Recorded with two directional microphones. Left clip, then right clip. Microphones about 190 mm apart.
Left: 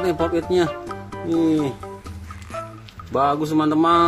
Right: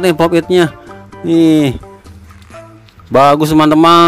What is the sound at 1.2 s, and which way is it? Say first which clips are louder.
Speech: right 10 dB; 50° right (ahead or behind).